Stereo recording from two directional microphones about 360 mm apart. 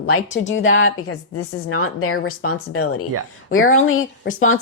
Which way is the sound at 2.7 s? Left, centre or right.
Left.